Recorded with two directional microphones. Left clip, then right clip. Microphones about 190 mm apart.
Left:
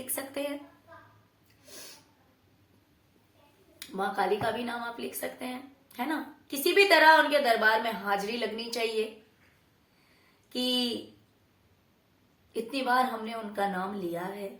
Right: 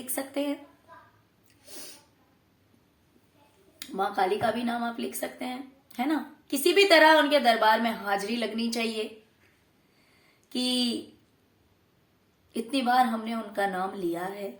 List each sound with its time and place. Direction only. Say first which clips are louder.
0.1 s a woman's voice: right 4 dB; 35° right (ahead or behind)
1.6 s a sound: right 2 dB; 30° right (ahead or behind)
3.8 s a woman's voice: right 3 dB; 40° right (ahead or behind)
10.5 s a woman's voice: right 1 dB; 40° right (ahead or behind)
12.7 s a woman's voice: right 3 dB; 40° right (ahead or behind)